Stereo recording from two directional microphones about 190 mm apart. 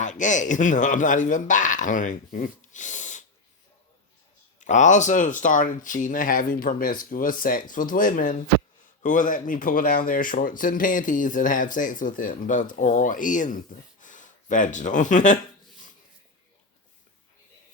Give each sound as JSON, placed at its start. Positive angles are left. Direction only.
{"t": 0.0, "sound": "speech", "side_deg": 40}
{"t": 4.6, "sound": "speech", "side_deg": 40}